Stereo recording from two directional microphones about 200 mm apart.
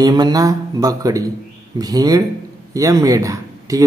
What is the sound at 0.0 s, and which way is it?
A man's voice, 20° right (ahead or behind).